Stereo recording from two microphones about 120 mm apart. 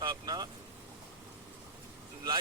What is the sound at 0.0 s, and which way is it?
Vehicle, 35° right (ahead or behind).